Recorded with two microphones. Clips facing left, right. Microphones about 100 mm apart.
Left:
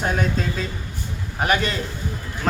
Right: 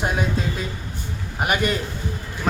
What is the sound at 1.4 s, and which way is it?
Speech, 10° right (ahead or behind).